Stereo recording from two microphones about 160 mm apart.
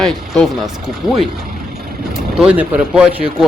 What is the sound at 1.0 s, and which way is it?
Speech, 25° left (ahead or behind).